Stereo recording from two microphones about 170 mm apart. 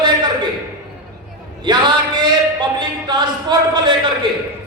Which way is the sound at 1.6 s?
25° right (ahead or behind).